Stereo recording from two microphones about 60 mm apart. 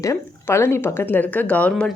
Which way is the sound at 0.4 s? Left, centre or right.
Left.